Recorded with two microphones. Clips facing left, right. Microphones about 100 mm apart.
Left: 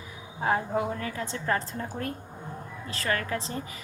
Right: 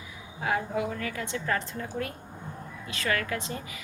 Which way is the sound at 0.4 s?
35° left (ahead or behind).